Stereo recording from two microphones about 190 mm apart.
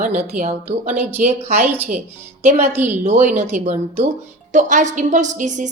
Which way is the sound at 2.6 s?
10° right (ahead or behind).